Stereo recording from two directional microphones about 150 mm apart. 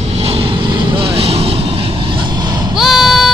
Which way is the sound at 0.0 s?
45° right (ahead or behind).